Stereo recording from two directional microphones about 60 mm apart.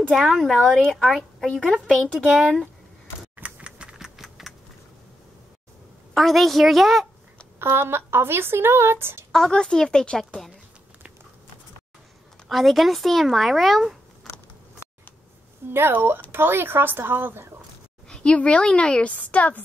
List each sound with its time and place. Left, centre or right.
0.1 s speech: centre
3.4 s typing: centre
4.2 s typing: centre
6.1 s speech: centre
7.5 s speech: right
9.3 s a woman's voice: centre
12.4 s speech: centre
15.7 s speech: right
18.0 s a woman's voice: centre